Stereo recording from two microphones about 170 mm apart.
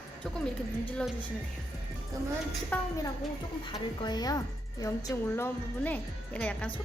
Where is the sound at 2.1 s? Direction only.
20° right (ahead or behind).